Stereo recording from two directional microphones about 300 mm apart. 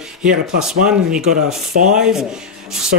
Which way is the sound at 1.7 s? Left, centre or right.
Right.